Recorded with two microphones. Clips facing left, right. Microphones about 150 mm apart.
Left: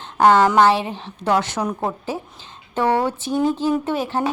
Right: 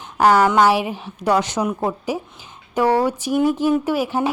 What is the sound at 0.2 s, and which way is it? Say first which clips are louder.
A woman's voice: left 1 dB; 10° right (ahead or behind).